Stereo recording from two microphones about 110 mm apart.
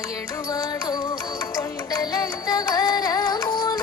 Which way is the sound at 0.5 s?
35° left (ahead or behind).